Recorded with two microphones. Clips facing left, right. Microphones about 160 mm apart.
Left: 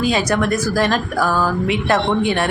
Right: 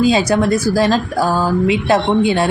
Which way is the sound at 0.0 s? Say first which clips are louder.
Right 4 dB; 25° right (ahead or behind).